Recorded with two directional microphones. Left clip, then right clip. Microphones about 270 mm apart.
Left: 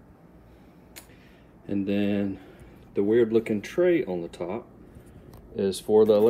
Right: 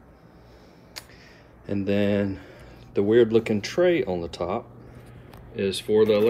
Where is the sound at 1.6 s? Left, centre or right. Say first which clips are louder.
Right 3 dB; centre.